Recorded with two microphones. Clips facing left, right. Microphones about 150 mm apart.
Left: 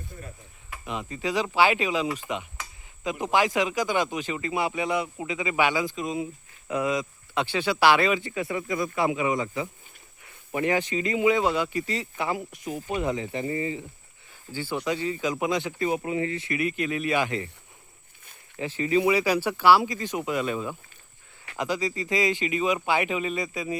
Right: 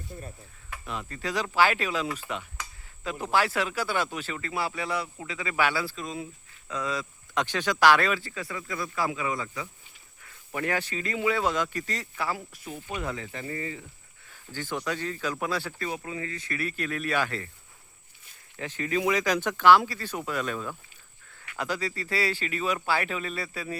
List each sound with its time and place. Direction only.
0.9 s speech: 10° left (ahead or behind)
18.5 s speech: 10° left (ahead or behind)